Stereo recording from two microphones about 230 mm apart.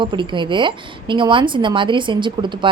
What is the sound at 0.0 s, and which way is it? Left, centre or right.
A woman's voice, right.